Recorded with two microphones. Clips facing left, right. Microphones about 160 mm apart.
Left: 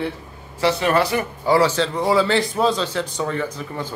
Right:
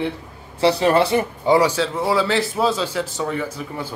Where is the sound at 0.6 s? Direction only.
30° right (ahead or behind); by 3.9 s 10° right (ahead or behind).